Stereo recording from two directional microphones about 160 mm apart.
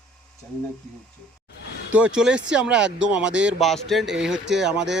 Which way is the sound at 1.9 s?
5° right (ahead or behind).